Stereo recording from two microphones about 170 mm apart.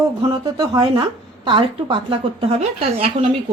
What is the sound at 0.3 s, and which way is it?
A woman's voice, 20° right (ahead or behind).